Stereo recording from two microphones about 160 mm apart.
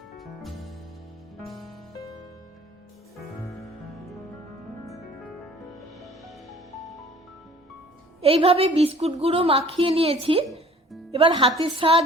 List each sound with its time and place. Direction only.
0.2 s music: centre (ahead or behind)
5.7 s music: centre (ahead or behind)
8.2 s a woman's voice: 40° right (ahead or behind)